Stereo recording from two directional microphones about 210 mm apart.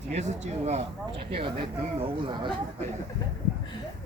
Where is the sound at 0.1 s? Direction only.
30° right (ahead or behind).